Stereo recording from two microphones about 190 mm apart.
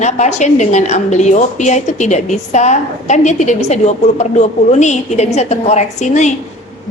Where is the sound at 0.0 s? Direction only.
35° left (ahead or behind).